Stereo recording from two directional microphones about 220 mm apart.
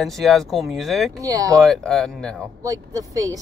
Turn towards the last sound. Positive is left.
turn(degrees=-15)  # may be behind; listen again after turning